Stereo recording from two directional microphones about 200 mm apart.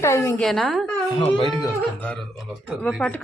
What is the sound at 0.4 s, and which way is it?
Speech, centre (ahead or behind).